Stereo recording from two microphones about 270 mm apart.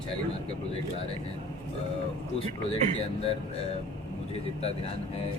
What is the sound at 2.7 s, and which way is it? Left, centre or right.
Speech, left.